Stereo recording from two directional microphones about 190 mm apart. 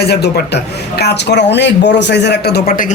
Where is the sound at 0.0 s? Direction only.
60° left (ahead or behind).